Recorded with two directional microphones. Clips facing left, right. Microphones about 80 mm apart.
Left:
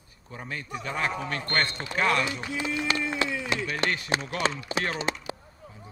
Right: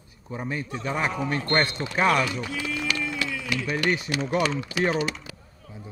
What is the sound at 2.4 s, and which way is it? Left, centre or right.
Speech, left.